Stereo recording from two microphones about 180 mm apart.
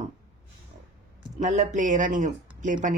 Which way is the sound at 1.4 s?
40° right (ahead or behind).